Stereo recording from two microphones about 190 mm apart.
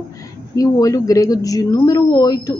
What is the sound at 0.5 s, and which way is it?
Speech, 20° left (ahead or behind).